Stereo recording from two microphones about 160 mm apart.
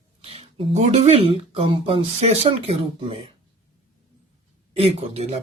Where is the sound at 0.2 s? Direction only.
40° right (ahead or behind).